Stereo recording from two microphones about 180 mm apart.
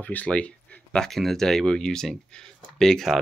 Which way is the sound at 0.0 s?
10° left (ahead or behind).